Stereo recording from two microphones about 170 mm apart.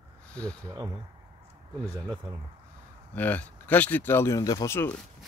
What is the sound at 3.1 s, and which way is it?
Speech, 10° left (ahead or behind).